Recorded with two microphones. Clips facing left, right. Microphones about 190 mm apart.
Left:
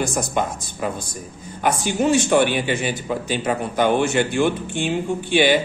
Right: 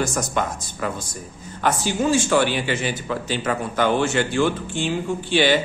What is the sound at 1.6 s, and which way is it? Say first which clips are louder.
Speech: left 1 dB; 15° left (ahead or behind).